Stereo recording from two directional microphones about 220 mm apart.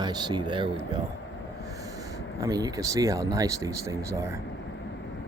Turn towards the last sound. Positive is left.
turn(degrees=-15)  # may be behind; listen again after turning